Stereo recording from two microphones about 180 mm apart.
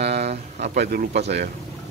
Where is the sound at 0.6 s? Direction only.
60° right (ahead or behind).